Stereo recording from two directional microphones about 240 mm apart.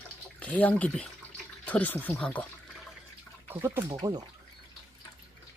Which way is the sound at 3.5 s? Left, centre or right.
Centre.